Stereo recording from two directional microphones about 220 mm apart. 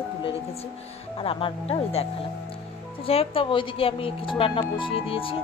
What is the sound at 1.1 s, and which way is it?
Speech, 25° left (ahead or behind).